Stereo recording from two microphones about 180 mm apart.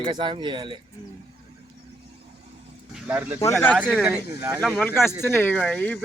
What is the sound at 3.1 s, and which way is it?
Speech, 10° right (ahead or behind).